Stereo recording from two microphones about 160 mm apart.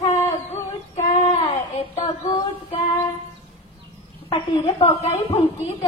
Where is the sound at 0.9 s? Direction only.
45° left (ahead or behind).